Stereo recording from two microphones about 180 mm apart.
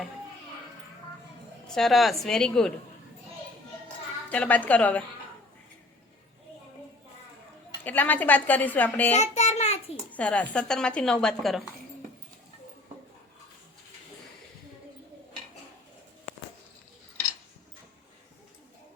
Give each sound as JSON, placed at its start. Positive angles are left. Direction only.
{"t": 1.6, "sound": "speech", "side_deg": 0}
{"t": 4.3, "sound": "a woman's voice", "side_deg": 10}
{"t": 7.9, "sound": "a woman's voice", "side_deg": 10}
{"t": 9.1, "sound": "a child's voice", "side_deg": 40}
{"t": 10.1, "sound": "speech", "side_deg": 5}